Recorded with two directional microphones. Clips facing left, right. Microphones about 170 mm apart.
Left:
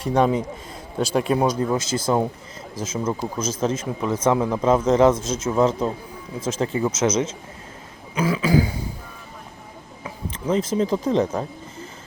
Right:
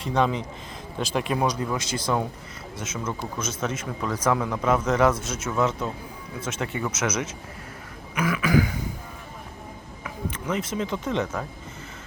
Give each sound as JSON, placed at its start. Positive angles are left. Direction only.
{"t": 0.0, "sound": "speech", "side_deg": 45}
{"t": 8.1, "sound": "throat clearing", "side_deg": 30}
{"t": 10.0, "sound": "speech", "side_deg": 30}